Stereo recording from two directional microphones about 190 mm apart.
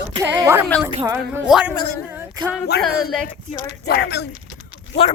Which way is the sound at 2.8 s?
Centre (ahead or behind).